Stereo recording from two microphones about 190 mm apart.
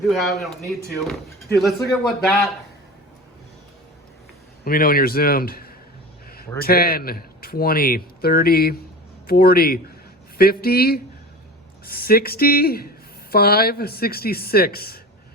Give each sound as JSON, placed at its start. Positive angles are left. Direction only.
{"t": 0.1, "sound": "a man's voice", "side_deg": 0}
{"t": 4.6, "sound": "a man's voice", "side_deg": 50}